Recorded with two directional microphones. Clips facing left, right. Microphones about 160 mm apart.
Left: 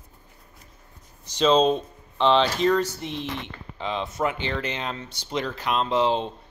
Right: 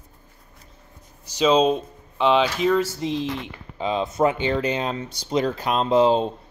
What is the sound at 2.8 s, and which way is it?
Speech, 90° right.